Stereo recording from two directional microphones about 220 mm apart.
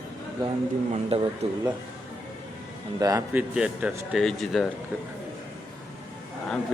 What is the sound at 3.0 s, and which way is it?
Speech, 15° right (ahead or behind).